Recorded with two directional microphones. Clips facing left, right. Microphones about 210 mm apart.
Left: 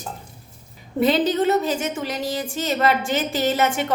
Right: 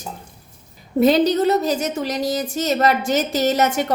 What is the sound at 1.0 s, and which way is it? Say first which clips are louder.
A woman's voice: right 4 dB; 40° right (ahead or behind).